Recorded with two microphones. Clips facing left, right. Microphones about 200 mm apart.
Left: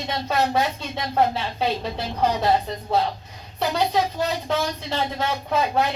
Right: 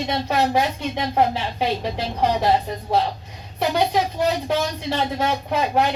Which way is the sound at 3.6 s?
15° right (ahead or behind).